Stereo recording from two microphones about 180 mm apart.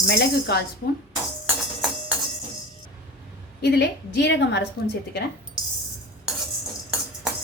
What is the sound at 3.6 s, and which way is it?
A woman's voice, 65° left (ahead or behind).